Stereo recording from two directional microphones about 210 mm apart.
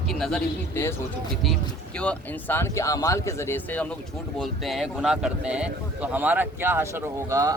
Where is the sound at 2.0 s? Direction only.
5° left (ahead or behind).